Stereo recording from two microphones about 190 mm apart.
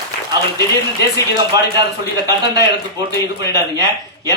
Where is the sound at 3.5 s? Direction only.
20° right (ahead or behind).